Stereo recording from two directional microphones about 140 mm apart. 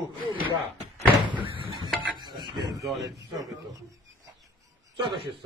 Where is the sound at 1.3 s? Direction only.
40° right (ahead or behind).